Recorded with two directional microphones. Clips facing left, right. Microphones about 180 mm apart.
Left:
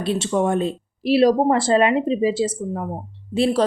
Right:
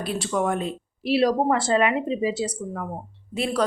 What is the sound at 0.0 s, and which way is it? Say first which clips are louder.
Speech: left 4 dB; 25° left (ahead or behind).